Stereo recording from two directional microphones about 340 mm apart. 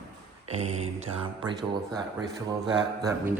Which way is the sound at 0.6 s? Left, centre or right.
Centre.